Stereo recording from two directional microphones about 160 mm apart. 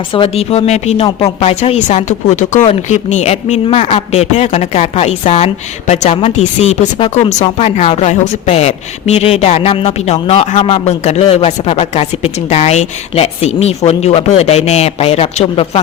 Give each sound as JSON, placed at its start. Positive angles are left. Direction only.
{"t": 0.1, "sound": "speech", "side_deg": 35}